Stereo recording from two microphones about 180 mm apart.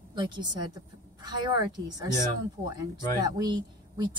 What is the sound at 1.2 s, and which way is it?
Speech, 20° right (ahead or behind).